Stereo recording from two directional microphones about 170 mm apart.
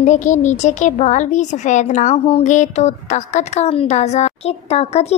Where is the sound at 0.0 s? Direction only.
45° left (ahead or behind).